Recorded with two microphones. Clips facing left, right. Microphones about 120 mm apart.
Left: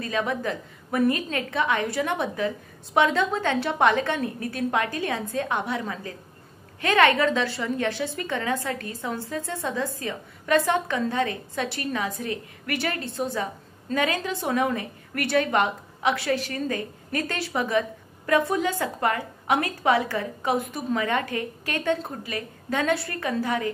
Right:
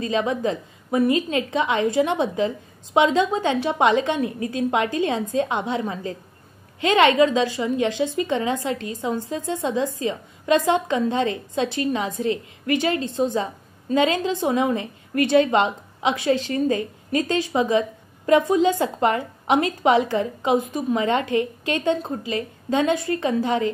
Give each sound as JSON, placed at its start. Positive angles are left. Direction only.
{"t": 0.0, "sound": "a woman's voice", "side_deg": -20}